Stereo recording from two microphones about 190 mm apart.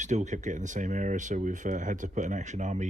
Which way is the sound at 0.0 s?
40° right (ahead or behind).